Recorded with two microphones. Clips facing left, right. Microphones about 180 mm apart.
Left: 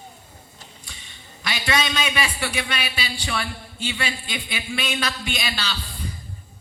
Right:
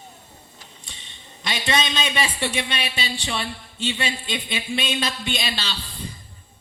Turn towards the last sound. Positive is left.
turn(degrees=-25)  # may be behind; listen again after turning